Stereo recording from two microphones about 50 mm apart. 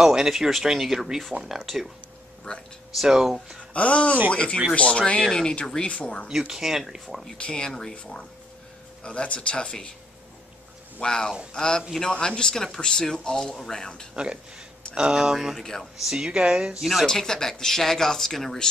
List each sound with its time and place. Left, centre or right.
0.0 s speech: centre
3.0 s speech: centre
3.7 s speech: left
6.2 s speech: centre
7.3 s speech: left
11.0 s speech: centre
14.1 s speech: centre
15.6 s speech: centre
16.0 s speech: centre
17.0 s speech: centre